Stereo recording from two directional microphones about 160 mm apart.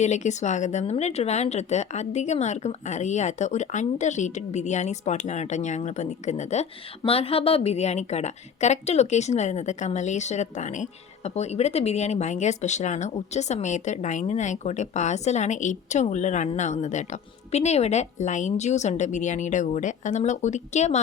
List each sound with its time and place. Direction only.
0.0 s a woman's voice: 45° left (ahead or behind)